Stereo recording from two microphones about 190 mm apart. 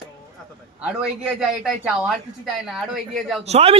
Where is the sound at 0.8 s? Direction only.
5° right (ahead or behind).